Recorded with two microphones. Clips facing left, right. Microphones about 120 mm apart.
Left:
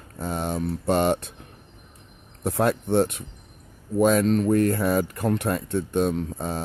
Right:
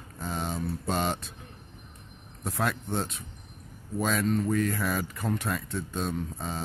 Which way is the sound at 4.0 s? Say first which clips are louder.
Left 8 dB; 55° left (ahead or behind).